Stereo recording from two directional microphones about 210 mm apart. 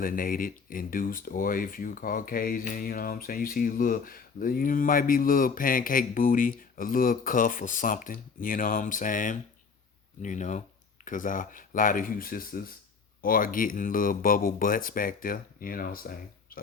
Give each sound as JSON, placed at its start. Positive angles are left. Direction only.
{"t": 0.0, "sound": "speech", "side_deg": 40}